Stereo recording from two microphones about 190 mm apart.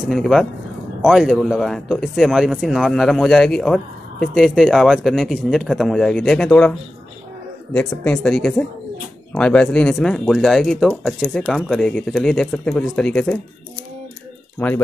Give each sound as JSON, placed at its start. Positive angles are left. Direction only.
{"t": 0.0, "sound": "speech", "side_deg": 0}
{"t": 7.7, "sound": "speech", "side_deg": 5}
{"t": 14.6, "sound": "speech", "side_deg": 10}